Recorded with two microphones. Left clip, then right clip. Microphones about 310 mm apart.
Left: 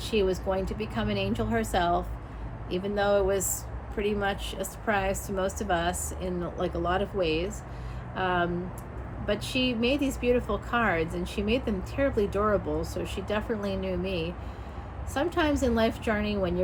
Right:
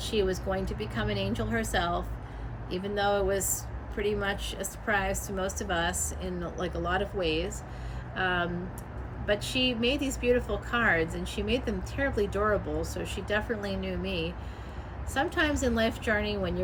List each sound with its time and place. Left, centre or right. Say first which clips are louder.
0.0 s a woman's voice: left 2 dB; centre